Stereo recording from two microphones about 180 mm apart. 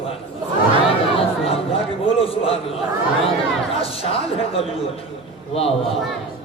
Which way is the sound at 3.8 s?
30° left (ahead or behind).